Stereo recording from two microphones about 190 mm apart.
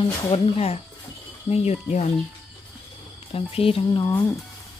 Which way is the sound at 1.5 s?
35° left (ahead or behind).